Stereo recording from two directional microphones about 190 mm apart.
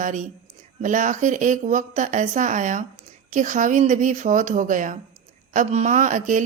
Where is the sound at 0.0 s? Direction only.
40° right (ahead or behind).